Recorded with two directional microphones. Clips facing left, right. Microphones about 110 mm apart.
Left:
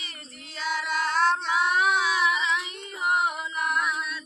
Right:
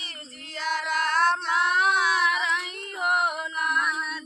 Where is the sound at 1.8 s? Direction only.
55° right (ahead or behind).